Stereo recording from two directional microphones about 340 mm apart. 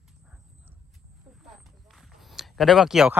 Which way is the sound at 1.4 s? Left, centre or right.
Centre.